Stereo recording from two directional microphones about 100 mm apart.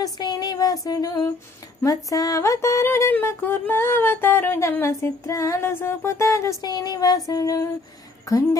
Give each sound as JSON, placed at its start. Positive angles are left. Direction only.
{"t": 0.0, "sound": "female singing", "side_deg": 45}
{"t": 1.8, "sound": "a sound", "side_deg": 35}
{"t": 6.6, "sound": "female singing", "side_deg": 40}